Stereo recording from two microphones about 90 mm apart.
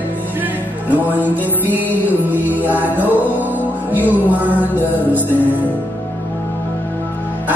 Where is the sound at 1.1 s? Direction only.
20° right (ahead or behind).